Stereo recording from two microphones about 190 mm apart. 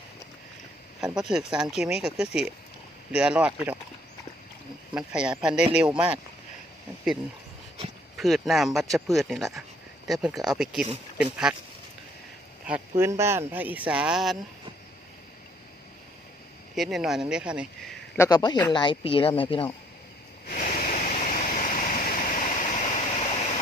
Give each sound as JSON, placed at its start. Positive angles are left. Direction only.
{"t": 1.1, "sound": "speech", "side_deg": 0}
{"t": 4.9, "sound": "speech", "side_deg": -5}
{"t": 8.2, "sound": "speech", "side_deg": 0}
{"t": 13.0, "sound": "speech", "side_deg": -15}
{"t": 16.7, "sound": "speech", "side_deg": 0}
{"t": 18.2, "sound": "speech", "side_deg": 20}
{"t": 20.5, "sound": "a sound", "side_deg": 45}